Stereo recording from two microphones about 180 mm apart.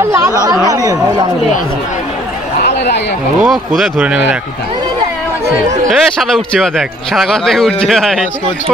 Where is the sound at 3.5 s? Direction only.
Centre (ahead or behind).